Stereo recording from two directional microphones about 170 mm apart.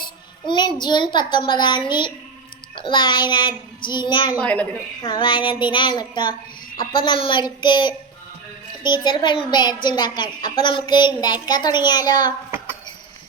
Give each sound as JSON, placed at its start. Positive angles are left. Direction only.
{"t": 0.0, "sound": "child singing", "side_deg": 25}
{"t": 0.8, "sound": "a woman's voice", "side_deg": 25}
{"t": 4.4, "sound": "a woman's voice", "side_deg": 10}
{"t": 5.0, "sound": "a woman's voice", "side_deg": 30}